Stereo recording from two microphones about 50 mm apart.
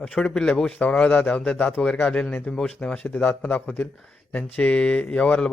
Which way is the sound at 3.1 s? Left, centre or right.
Left.